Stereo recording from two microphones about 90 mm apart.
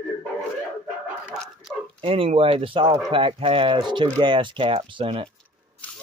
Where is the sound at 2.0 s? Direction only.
90° right.